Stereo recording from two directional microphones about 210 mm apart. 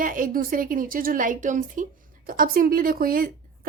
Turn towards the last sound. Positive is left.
turn(degrees=-45)  # may be behind; listen again after turning